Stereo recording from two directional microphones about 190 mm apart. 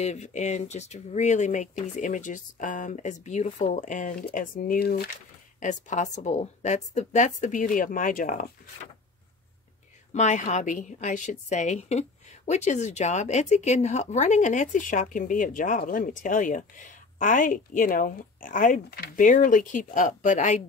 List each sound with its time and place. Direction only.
0.0 s a woman's voice: 35° left (ahead or behind); by 5.1 s 55° left (ahead or behind)
5.6 s a woman's voice: 40° left (ahead or behind)
10.1 s a woman's voice: 40° left (ahead or behind)